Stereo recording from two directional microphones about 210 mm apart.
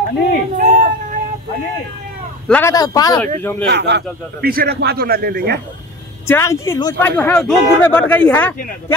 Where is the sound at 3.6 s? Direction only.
55° right (ahead or behind).